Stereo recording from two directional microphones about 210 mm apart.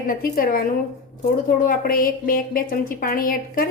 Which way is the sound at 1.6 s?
40° left (ahead or behind).